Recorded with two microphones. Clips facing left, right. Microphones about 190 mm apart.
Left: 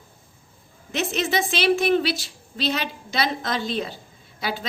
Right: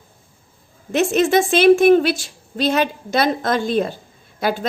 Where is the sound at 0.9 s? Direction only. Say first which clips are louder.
Right 9 dB; 50° right (ahead or behind).